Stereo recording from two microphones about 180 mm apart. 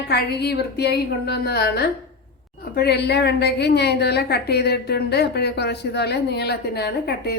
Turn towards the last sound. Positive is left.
turn(degrees=65)  # may be behind; listen again after turning